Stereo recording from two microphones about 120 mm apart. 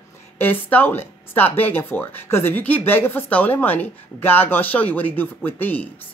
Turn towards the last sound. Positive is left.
turn(degrees=15)  # may be behind; listen again after turning